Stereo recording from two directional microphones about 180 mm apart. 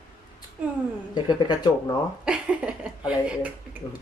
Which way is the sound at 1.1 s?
25° left (ahead or behind).